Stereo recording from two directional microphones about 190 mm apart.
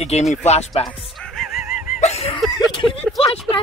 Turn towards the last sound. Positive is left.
turn(degrees=30)  # may be behind; listen again after turning